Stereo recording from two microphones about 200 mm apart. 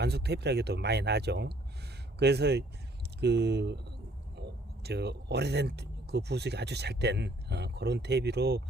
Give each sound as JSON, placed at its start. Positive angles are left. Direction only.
{"t": 0.0, "sound": "speech", "side_deg": -55}